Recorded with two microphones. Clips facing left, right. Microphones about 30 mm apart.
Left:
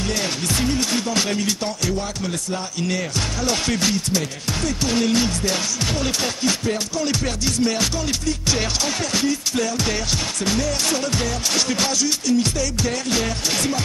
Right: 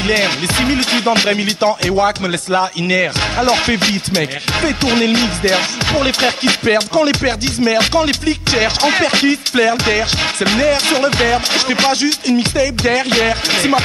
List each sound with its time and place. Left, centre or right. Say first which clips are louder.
0.1 s music: right 11 dB; right